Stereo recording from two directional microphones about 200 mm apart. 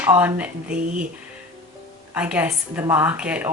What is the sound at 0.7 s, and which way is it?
Speech, 40° right (ahead or behind).